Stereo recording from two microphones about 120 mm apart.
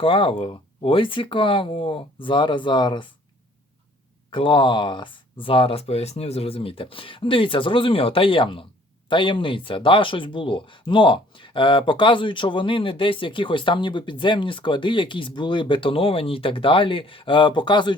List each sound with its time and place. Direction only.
0.0 s speech: 45° left (ahead or behind)
4.3 s speech: 45° left (ahead or behind)